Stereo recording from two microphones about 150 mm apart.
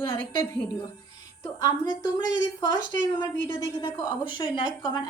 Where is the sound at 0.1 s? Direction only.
35° left (ahead or behind).